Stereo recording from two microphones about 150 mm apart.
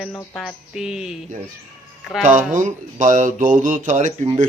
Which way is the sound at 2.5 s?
60° right (ahead or behind).